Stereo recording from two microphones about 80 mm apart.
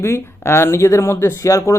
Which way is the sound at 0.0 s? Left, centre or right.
Left.